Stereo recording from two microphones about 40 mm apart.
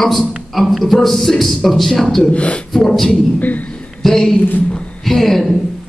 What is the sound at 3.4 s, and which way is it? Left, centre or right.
Speech, left.